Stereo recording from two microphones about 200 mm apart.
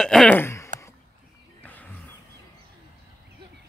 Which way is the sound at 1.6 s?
10° left (ahead or behind).